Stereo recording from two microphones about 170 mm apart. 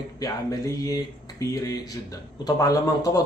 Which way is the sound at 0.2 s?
20° left (ahead or behind).